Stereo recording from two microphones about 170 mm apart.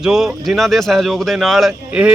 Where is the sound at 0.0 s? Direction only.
5° right (ahead or behind).